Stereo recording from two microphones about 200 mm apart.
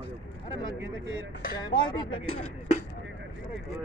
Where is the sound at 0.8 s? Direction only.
65° right (ahead or behind).